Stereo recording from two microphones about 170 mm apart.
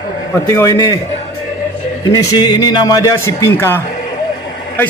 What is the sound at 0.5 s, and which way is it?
Speech, 20° left (ahead or behind).